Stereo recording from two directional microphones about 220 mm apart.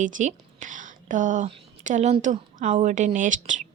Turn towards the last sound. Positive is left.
turn(degrees=-35)  # may be behind; listen again after turning